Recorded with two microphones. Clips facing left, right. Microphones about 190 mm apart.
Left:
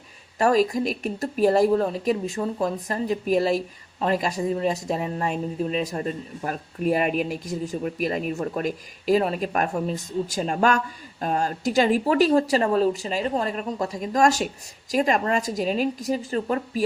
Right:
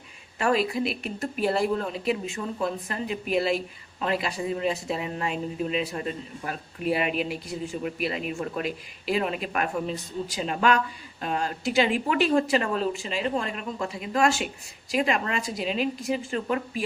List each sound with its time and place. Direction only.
0.3 s speech: 40° left (ahead or behind)